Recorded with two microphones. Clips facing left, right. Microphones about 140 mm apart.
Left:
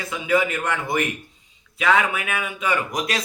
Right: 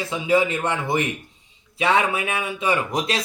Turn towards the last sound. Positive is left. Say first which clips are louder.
# right 1 dB
turn(degrees=-30)  # may be behind; listen again after turning